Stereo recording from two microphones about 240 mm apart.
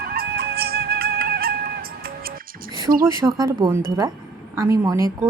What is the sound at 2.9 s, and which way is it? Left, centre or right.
A woman's voice, centre.